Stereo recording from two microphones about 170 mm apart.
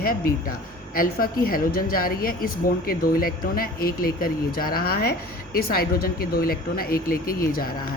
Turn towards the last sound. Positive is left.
turn(degrees=60)  # may be behind; listen again after turning